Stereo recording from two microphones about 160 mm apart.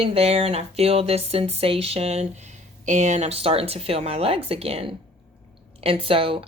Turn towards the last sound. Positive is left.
turn(degrees=-35)  # may be behind; listen again after turning